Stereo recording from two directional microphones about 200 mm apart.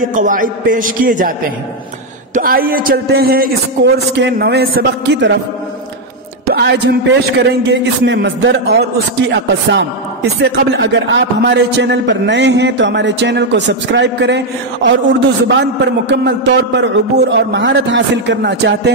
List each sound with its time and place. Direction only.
0.0 s a man's voice: 40° right (ahead or behind)
2.3 s a man's voice: 45° right (ahead or behind)
6.4 s a man's voice: 55° right (ahead or behind)